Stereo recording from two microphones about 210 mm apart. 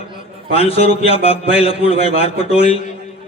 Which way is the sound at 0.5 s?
25° left (ahead or behind).